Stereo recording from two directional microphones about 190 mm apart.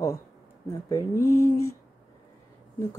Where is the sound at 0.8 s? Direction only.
15° left (ahead or behind).